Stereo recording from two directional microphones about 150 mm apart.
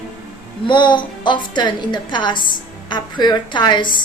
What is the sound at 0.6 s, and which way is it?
A woman's voice, 30° left (ahead or behind).